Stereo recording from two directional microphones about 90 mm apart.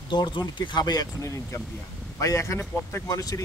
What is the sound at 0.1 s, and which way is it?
Speech, 55° left (ahead or behind).